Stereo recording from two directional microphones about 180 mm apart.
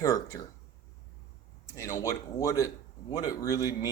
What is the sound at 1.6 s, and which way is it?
Speech, 15° left (ahead or behind).